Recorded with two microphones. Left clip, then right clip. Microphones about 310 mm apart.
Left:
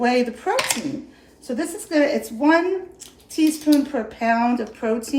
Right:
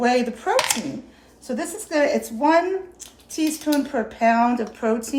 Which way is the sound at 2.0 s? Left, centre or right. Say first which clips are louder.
Even; right.